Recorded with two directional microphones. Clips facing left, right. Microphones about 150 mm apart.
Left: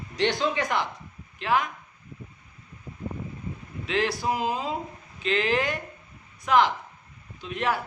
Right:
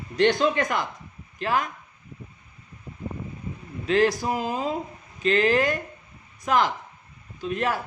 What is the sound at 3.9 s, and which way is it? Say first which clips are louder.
Speech: right 5 dB; 45° right (ahead or behind).